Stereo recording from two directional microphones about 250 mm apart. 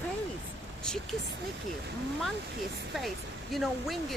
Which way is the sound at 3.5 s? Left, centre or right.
Centre.